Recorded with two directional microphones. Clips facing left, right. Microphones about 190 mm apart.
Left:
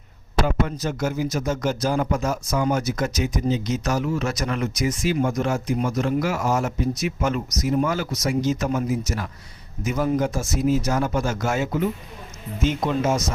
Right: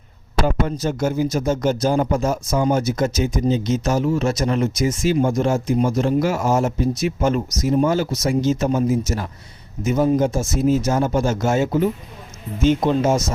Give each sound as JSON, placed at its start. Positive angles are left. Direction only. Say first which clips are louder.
{"t": 0.4, "sound": "a man's voice", "louder": "right 5 dB", "side_deg": -30}